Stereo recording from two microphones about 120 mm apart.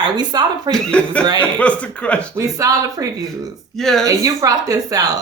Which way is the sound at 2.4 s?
25° right (ahead or behind).